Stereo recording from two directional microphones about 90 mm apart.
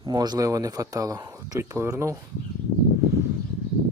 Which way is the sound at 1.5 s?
30° right (ahead or behind).